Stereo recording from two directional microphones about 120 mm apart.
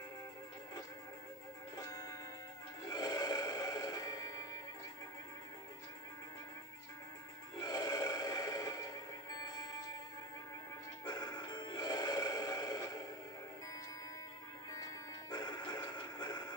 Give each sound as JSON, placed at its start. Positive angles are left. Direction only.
{"t": 2.9, "sound": "music", "side_deg": 35}
{"t": 7.6, "sound": "music", "side_deg": 35}
{"t": 11.1, "sound": "music", "side_deg": 35}
{"t": 15.3, "sound": "music", "side_deg": 35}